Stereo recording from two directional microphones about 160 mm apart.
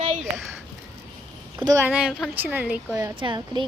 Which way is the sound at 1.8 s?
5° right (ahead or behind).